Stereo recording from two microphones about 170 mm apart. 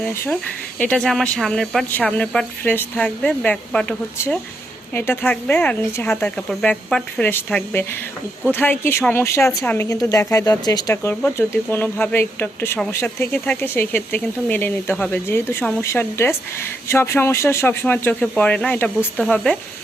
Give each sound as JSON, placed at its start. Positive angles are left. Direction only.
{"t": 0.0, "sound": "speech", "side_deg": 10}
{"t": 4.9, "sound": "speech", "side_deg": 15}
{"t": 9.5, "sound": "speech", "side_deg": 0}
{"t": 9.7, "sound": "speech", "side_deg": 20}